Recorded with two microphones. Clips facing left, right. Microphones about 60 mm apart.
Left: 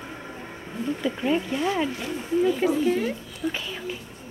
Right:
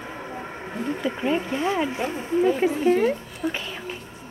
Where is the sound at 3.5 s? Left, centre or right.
Centre.